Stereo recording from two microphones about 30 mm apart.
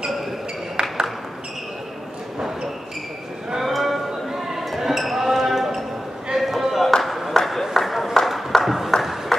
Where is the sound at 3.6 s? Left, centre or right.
Centre.